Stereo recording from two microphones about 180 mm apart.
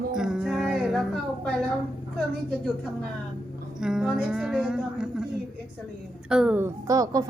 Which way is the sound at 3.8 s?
5° right (ahead or behind).